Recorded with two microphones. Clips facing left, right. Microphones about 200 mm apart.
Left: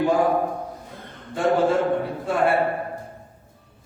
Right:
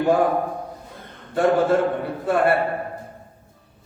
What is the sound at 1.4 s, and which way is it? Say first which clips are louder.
Speech: right 2 dB; 60° right (ahead or behind).